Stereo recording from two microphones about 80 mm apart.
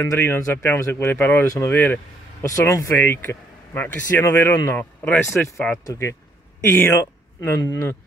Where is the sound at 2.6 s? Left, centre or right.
Left.